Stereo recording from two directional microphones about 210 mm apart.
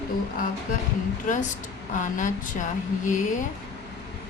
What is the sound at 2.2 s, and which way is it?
Speech, 35° left (ahead or behind).